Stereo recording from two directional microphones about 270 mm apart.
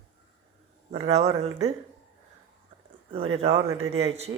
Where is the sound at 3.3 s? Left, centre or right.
Right.